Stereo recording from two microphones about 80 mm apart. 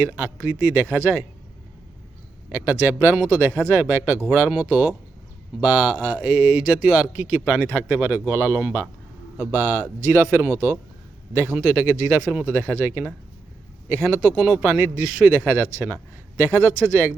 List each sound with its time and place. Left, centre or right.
0.0 s speech: right
2.5 s speech: right
12.2 s speech: centre
12.5 s a man's voice: right